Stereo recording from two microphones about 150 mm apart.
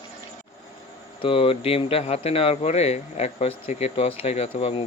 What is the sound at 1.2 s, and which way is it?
Speech, 40° left (ahead or behind).